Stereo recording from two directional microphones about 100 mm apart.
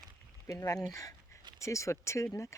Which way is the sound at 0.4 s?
30° left (ahead or behind).